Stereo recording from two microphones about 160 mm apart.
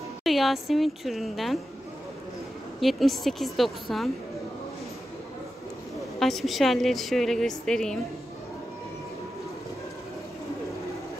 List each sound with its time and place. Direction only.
0.2 s a woman's voice: centre (ahead or behind)
2.8 s a woman's voice: centre (ahead or behind)
6.1 s a woman's voice: centre (ahead or behind)